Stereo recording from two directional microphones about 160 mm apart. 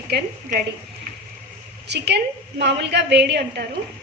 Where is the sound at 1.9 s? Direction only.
90° right.